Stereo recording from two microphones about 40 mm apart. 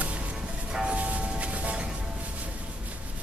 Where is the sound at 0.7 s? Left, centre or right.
Right.